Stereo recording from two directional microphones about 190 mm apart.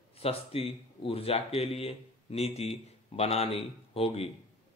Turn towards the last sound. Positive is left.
turn(degrees=30)  # may be behind; listen again after turning